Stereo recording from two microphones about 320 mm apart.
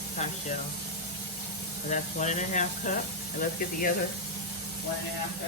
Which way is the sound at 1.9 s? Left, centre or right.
Left.